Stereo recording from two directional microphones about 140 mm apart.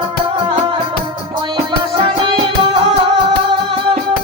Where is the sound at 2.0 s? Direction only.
40° right (ahead or behind).